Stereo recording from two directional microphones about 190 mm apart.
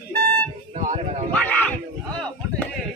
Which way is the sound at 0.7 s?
40° right (ahead or behind).